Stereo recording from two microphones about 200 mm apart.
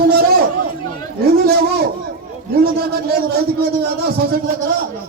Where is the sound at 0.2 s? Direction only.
50° right (ahead or behind).